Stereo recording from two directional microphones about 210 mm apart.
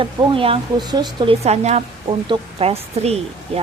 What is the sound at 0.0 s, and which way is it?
Speech, 25° right (ahead or behind).